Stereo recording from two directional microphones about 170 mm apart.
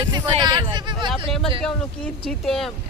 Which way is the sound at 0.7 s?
25° right (ahead or behind).